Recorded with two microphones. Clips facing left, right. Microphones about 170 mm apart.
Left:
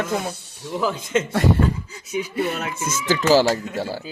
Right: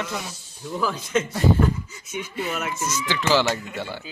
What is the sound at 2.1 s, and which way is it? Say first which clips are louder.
Speech: left 7 dB; 35° left (ahead or behind).